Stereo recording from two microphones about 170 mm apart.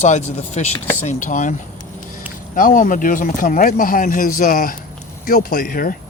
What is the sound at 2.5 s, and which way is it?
Speech, 50° left (ahead or behind).